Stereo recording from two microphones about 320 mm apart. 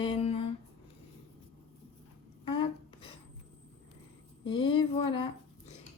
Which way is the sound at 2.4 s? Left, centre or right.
Centre.